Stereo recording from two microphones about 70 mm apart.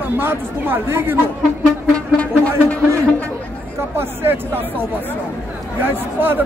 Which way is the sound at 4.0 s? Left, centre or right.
Right.